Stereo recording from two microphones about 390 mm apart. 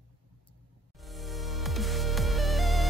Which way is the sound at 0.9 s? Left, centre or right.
Centre.